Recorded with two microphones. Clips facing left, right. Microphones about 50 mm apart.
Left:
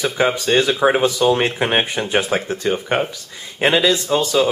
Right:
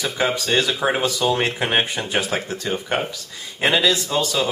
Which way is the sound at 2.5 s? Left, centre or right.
Left.